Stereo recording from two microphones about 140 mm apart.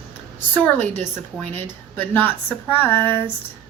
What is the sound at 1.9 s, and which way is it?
Speech, 15° left (ahead or behind).